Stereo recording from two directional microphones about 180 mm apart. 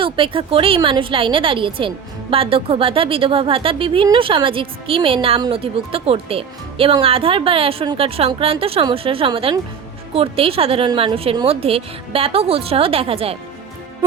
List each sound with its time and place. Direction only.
0.0 s a woman's voice: 30° right (ahead or behind)